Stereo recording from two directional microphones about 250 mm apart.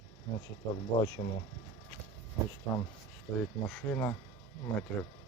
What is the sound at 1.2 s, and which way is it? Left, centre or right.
Speech, left.